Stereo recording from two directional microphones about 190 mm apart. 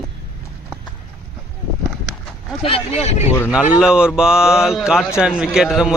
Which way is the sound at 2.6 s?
35° left (ahead or behind).